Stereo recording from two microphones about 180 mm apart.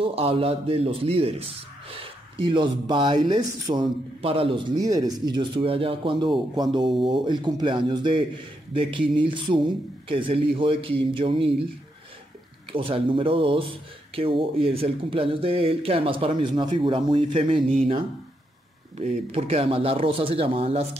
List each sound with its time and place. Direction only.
0.0 s speech: 30° right (ahead or behind)
12.7 s speech: 30° right (ahead or behind)
18.9 s speech: 35° right (ahead or behind)